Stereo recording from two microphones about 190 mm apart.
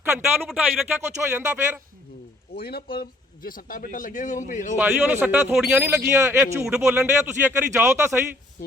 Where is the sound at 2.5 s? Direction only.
55° left (ahead or behind).